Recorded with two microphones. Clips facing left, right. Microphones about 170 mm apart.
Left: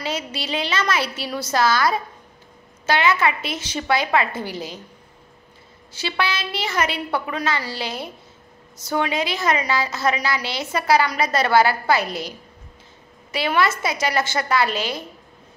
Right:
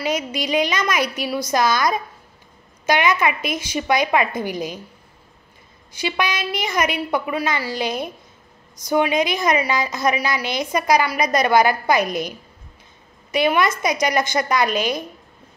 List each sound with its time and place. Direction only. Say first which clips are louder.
0.0 s a woman's voice: right 4 dB; 15° right (ahead or behind)
5.9 s a woman's voice: right 2 dB; 15° right (ahead or behind)